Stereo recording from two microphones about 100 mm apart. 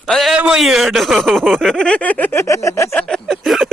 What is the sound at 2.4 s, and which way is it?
Speech, 30° left (ahead or behind).